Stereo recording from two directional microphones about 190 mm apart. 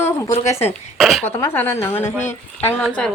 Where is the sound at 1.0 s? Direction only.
Centre (ahead or behind).